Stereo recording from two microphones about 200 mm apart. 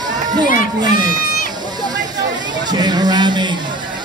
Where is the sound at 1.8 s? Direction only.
20° right (ahead or behind).